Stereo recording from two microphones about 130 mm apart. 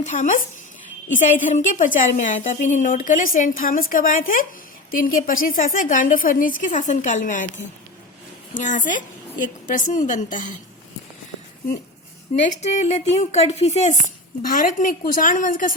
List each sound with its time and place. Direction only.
0.0 s a woman's voice: 75° left (ahead or behind)
8.5 s a woman's voice: 75° left (ahead or behind)
12.3 s a woman's voice: 65° left (ahead or behind)
14.4 s a woman's voice: 90° left